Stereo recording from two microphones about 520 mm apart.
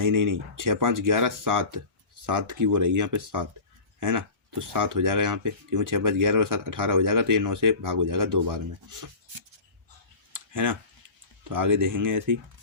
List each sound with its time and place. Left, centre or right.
0.0 s speech: right
10.3 s a sound: right
11.4 s speech: right